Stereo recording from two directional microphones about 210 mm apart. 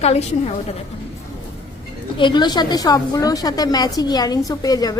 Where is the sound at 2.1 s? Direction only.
20° left (ahead or behind).